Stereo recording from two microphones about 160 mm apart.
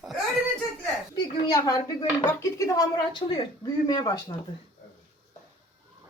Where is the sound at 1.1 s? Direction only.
25° left (ahead or behind).